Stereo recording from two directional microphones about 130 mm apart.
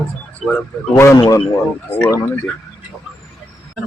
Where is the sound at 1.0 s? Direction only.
20° left (ahead or behind).